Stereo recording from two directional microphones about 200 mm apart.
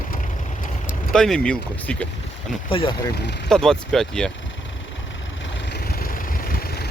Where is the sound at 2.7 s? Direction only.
25° left (ahead or behind).